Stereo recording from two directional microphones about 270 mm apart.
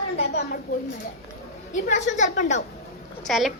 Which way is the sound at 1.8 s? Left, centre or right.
Left.